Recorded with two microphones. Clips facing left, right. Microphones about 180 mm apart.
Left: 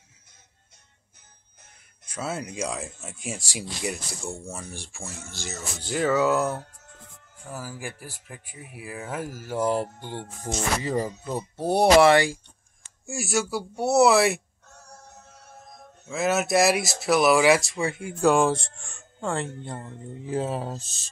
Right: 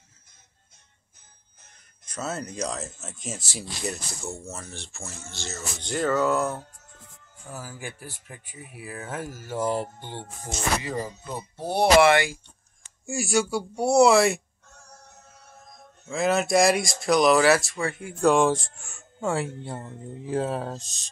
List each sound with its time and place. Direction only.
2.0 s speech: 10° left (ahead or behind)
10.8 s speech: 35° left (ahead or behind)
13.0 s speech: centre (ahead or behind)
16.1 s speech: 5° left (ahead or behind)
18.2 s speech: centre (ahead or behind)